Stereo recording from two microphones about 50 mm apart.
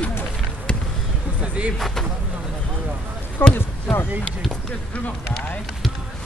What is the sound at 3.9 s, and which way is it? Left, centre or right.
Speech, centre.